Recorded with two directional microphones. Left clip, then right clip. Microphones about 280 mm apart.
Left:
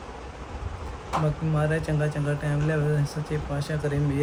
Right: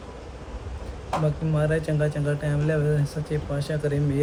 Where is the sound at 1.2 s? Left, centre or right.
Centre.